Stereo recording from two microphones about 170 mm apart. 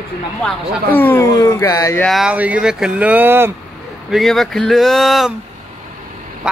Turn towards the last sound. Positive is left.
turn(degrees=0)  # may be behind; listen again after turning